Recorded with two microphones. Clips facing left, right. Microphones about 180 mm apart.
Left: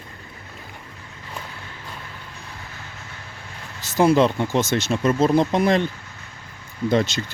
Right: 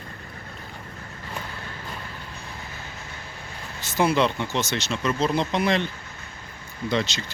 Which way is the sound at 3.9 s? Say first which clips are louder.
Left 5 dB; 40° left (ahead or behind).